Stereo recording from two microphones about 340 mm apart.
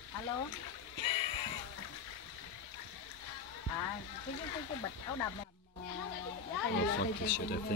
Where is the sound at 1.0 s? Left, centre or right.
Centre.